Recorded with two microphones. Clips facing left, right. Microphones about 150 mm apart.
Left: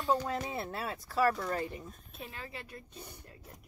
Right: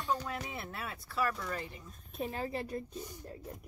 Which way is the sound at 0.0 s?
35° left (ahead or behind).